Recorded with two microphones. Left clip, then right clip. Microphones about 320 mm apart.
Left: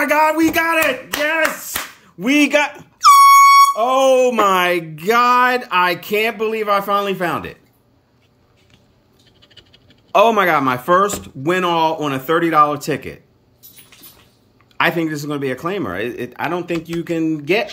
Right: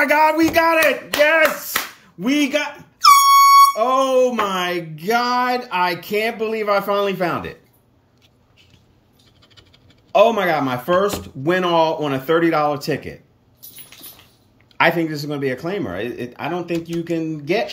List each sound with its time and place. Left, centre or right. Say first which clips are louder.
0.0 s speech: even; centre
1.7 s a sound: right 2 dB; centre
6.0 s speech: left 3 dB; centre
10.1 s a sound: left 2 dB; centre
10.9 s speech: left 2 dB; centre
14.8 s speech: even; centre